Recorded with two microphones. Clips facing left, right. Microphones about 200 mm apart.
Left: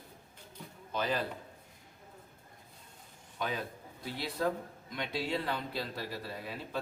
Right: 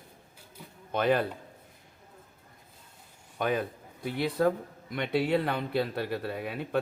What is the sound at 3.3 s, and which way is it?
A man's voice, 55° right (ahead or behind).